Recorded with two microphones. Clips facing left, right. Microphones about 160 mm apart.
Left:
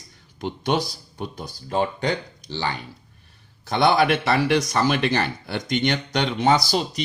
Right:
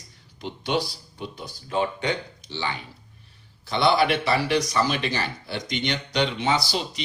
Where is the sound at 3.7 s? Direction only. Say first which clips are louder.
Left 2 dB; 50° left (ahead or behind).